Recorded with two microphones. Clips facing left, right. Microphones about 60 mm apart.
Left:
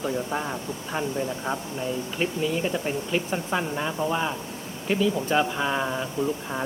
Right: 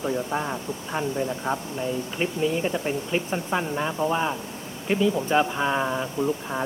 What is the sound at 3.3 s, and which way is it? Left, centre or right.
Speech, centre.